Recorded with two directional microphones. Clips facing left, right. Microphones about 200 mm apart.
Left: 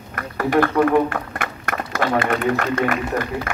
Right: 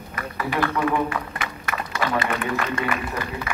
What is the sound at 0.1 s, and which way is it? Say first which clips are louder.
A man's voice: left 8 dB; 50° left (ahead or behind).